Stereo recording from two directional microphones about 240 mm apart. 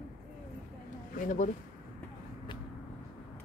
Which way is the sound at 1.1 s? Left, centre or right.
Left.